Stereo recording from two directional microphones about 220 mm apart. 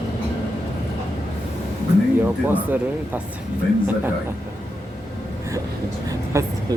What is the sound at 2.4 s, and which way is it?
Speech, 5° right (ahead or behind).